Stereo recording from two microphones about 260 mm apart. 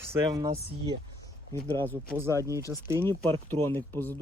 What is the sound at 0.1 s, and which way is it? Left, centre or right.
Speech, centre.